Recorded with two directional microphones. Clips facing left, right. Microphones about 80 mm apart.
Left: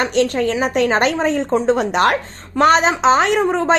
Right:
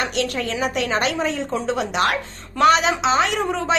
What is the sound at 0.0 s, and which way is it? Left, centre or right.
A woman's voice, left.